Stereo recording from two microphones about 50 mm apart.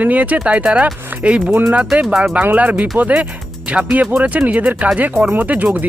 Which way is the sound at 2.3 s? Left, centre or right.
Right.